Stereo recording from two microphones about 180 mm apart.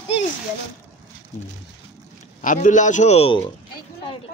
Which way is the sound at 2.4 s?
45° left (ahead or behind).